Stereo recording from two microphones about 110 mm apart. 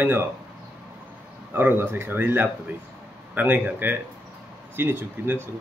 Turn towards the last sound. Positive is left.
turn(degrees=-20)  # may be behind; listen again after turning